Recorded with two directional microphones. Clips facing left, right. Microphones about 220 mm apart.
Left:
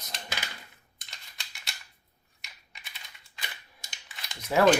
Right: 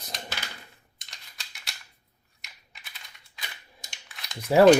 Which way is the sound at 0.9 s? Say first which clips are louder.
Left 1 dB; centre (ahead or behind).